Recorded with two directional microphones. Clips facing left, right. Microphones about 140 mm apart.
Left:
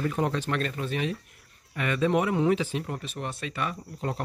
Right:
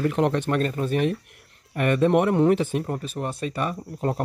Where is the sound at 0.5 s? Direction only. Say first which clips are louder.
Right 6 dB; 40° right (ahead or behind).